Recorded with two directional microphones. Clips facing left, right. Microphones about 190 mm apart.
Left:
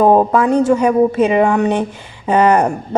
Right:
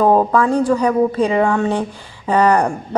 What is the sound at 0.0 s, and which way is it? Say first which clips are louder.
A woman's voice: left 2 dB; 20° left (ahead or behind).